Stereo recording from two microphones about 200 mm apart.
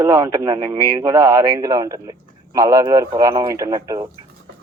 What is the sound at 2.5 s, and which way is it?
Speech, 15° right (ahead or behind).